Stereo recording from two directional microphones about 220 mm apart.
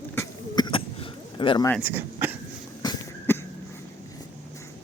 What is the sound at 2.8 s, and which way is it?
Cough, 15° left (ahead or behind).